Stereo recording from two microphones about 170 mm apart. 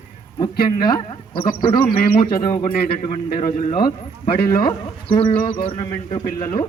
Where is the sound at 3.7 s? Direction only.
30° left (ahead or behind).